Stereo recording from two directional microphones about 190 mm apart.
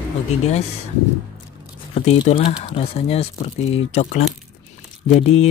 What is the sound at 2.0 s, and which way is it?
Speech, 35° left (ahead or behind).